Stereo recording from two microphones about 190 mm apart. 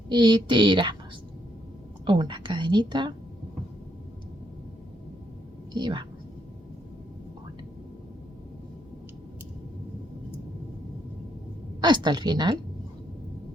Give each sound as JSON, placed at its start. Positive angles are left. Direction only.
{"t": 0.1, "sound": "a woman's voice", "side_deg": -25}
{"t": 2.0, "sound": "a woman's voice", "side_deg": -25}
{"t": 5.7, "sound": "a woman's voice", "side_deg": -25}
{"t": 11.8, "sound": "a woman's voice", "side_deg": -25}